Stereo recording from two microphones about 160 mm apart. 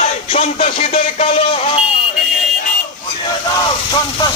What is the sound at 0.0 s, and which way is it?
Music, 40° left (ahead or behind).